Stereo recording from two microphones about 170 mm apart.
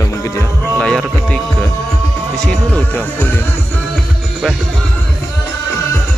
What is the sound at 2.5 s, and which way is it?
Speech, 10° left (ahead or behind).